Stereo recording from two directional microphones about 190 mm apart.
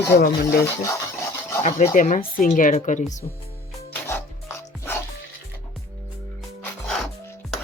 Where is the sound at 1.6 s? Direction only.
40° left (ahead or behind).